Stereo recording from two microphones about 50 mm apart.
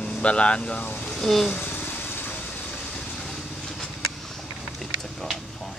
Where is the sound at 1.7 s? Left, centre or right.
Left.